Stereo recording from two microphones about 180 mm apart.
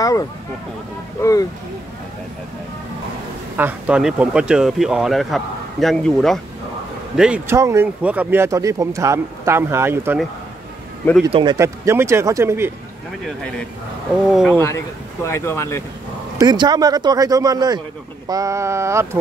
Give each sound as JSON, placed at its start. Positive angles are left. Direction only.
{"t": 0.0, "sound": "speech", "side_deg": 20}
{"t": 3.5, "sound": "speech", "side_deg": -10}
{"t": 11.3, "sound": "speech", "side_deg": -20}
{"t": 13.2, "sound": "speech", "side_deg": 5}
{"t": 16.3, "sound": "speech", "side_deg": -20}